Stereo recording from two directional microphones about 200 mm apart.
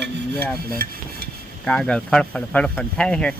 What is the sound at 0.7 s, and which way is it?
Rub, 45° right (ahead or behind).